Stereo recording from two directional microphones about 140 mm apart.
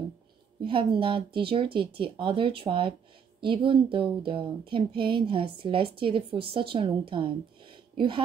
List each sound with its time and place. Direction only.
0.7 s speech: 40° right (ahead or behind)